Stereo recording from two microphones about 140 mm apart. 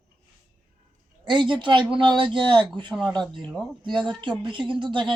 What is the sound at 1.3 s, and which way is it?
Speech, 35° right (ahead or behind).